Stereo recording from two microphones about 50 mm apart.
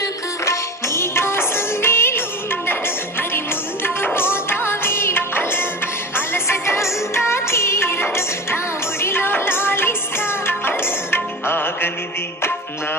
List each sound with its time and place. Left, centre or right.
0.4 s music: left